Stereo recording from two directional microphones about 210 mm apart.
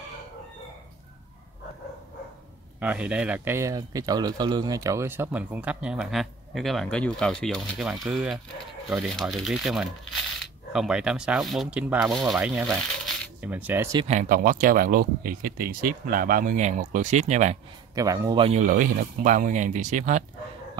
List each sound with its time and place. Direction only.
2.8 s speech: 5° right (ahead or behind)
13.0 s coin: 5° right (ahead or behind)
13.9 s speech: 30° right (ahead or behind)
17.9 s speech: 15° right (ahead or behind); by 20.2 s 35° right (ahead or behind)